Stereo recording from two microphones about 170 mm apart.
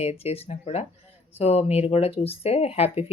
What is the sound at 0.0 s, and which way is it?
Speech, 40° left (ahead or behind).